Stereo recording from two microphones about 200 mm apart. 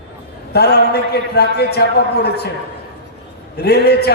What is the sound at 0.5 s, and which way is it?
A man's voice, 55° left (ahead or behind).